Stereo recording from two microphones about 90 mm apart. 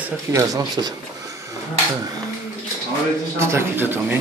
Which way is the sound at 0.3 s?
35° right (ahead or behind).